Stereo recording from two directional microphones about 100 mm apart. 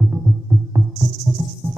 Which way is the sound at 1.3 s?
Centre (ahead or behind).